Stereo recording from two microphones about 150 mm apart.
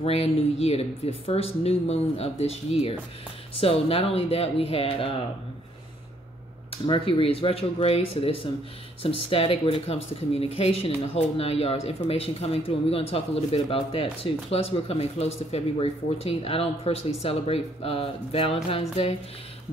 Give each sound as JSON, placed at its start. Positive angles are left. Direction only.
{"t": 0.0, "sound": "speech", "side_deg": 40}
{"t": 6.7, "sound": "speech", "side_deg": 35}